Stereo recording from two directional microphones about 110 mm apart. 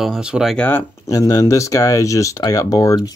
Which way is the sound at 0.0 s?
5° right (ahead or behind).